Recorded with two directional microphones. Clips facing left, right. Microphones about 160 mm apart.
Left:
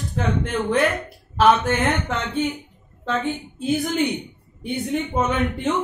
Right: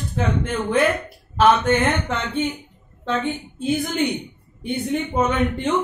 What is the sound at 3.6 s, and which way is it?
Speech, centre (ahead or behind).